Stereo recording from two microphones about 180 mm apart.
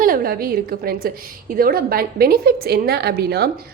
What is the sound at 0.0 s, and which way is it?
A woman's voice, 55° right (ahead or behind).